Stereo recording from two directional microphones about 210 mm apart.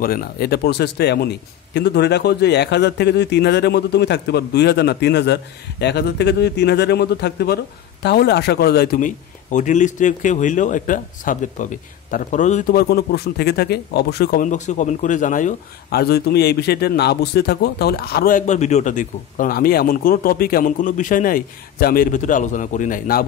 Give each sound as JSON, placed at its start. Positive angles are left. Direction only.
{"t": 0.0, "sound": "a man's voice", "side_deg": 45}